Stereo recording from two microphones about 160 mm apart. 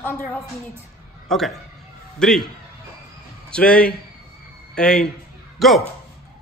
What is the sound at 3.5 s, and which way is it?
A woman's voice, 5° left (ahead or behind).